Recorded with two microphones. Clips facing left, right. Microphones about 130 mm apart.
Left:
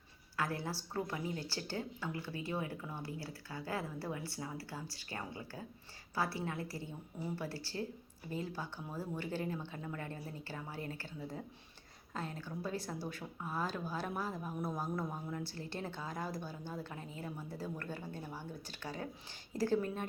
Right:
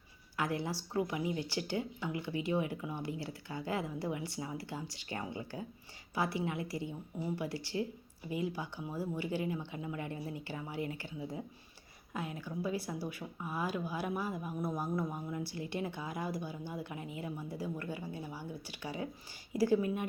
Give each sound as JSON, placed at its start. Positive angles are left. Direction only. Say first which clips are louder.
{"t": 0.3, "sound": "a woman's voice", "louder": "right 3 dB", "side_deg": -20}